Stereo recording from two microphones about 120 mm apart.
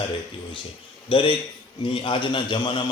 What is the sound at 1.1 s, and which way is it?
Speech, 45° left (ahead or behind).